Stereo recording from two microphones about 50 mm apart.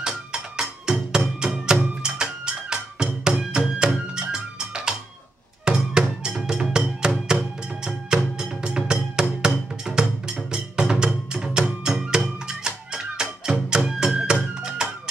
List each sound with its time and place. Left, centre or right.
0.3 s music: centre